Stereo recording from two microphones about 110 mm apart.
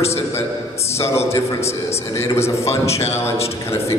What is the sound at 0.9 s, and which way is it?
A man's voice, 25° left (ahead or behind).